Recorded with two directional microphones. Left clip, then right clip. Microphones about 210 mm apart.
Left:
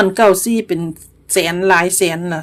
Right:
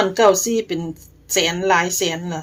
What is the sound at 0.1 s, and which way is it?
Speech, 30° left (ahead or behind).